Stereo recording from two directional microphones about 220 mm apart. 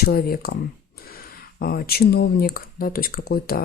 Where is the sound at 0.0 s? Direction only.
45° left (ahead or behind).